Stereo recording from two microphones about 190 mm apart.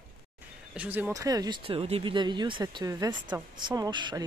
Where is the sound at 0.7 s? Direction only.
10° right (ahead or behind).